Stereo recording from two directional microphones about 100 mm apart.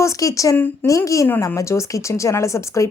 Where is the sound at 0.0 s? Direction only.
35° left (ahead or behind).